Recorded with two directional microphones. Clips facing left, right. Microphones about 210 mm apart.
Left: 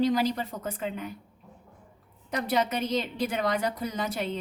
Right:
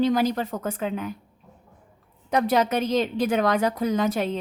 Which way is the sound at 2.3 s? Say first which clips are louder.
Right 6 dB; 90° right.